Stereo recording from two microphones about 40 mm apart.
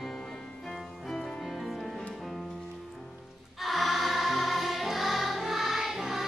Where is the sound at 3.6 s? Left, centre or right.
Centre.